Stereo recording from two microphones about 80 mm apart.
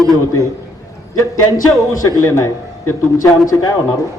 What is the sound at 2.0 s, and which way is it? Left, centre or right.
A man's voice, left.